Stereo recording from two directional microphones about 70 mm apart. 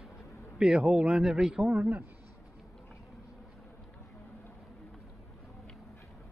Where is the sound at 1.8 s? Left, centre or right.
Right.